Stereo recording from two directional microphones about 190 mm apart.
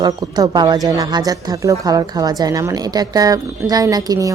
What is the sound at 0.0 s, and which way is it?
A woman's voice, 20° right (ahead or behind).